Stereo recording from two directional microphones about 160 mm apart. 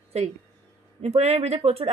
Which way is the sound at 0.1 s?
40° right (ahead or behind).